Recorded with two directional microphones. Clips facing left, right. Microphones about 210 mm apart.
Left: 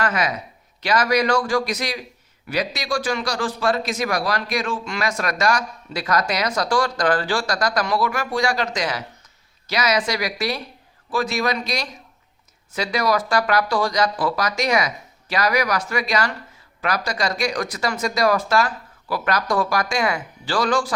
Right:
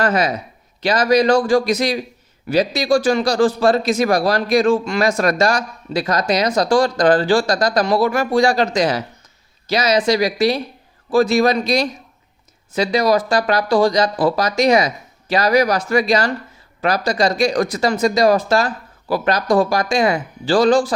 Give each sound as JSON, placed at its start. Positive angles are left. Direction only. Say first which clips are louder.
{"t": 0.0, "sound": "speech", "louder": "right 5 dB", "side_deg": -30}